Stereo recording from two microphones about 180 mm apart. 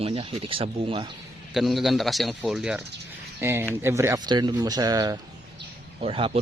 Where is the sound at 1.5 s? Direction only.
Centre (ahead or behind); by 5.2 s 20° right (ahead or behind).